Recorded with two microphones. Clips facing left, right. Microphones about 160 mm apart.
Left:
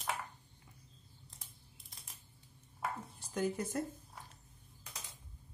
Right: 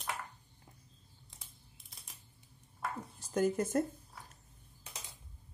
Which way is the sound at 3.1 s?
45° right (ahead or behind).